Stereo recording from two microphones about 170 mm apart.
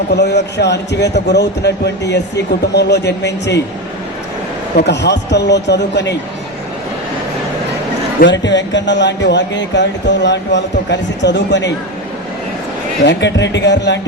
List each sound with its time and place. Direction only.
0.1 s speech: 80° left
4.8 s a man's voice: 90° left
8.2 s a man's voice: 90° left
13.1 s a man's voice: 90° left